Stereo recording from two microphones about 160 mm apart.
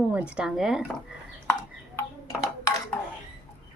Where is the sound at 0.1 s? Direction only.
5° right (ahead or behind).